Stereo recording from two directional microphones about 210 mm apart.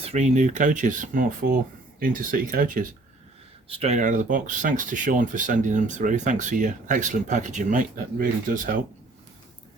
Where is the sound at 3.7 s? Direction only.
30° right (ahead or behind).